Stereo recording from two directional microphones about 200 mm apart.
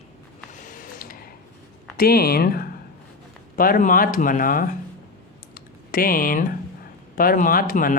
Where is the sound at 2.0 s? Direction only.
50° left (ahead or behind).